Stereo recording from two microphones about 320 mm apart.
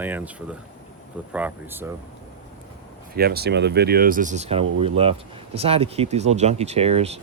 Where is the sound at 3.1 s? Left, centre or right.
Right.